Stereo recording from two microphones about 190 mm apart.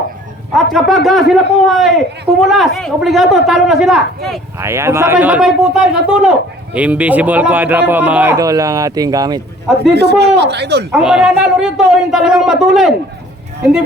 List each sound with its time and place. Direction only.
0.5 s a man's voice: centre (ahead or behind)
4.6 s speech: 15° right (ahead or behind)
9.9 s speech: 60° right (ahead or behind)
10.9 s a man's voice: 5° right (ahead or behind)